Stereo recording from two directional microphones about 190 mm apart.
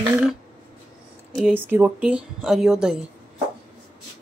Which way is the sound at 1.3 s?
5° right (ahead or behind).